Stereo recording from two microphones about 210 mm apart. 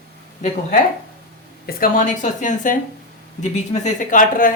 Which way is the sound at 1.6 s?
40° left (ahead or behind).